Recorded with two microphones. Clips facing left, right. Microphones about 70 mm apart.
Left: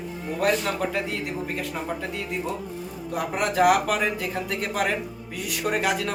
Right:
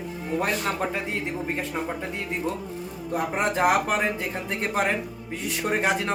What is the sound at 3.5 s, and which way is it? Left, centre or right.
Speech, right.